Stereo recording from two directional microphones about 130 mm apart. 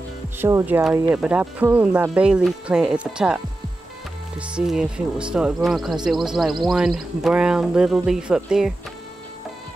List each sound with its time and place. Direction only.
0.4 s speech: 20° right (ahead or behind)
1.1 s speech: 5° right (ahead or behind)
4.4 s speech: 5° right (ahead or behind)